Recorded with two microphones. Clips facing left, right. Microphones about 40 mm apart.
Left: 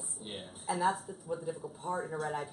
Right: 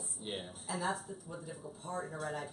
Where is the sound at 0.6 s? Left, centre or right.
Centre.